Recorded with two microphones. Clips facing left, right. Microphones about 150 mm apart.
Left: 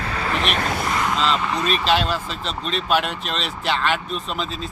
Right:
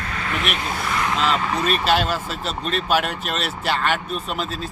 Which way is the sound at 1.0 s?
5° right (ahead or behind).